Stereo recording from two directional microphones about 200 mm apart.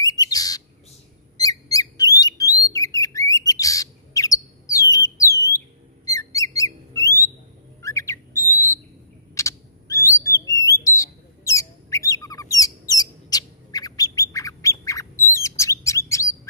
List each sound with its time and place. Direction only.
0.0 s bird: 20° left (ahead or behind)
6.0 s a sound: 15° left (ahead or behind)
7.8 s bird: 15° left (ahead or behind)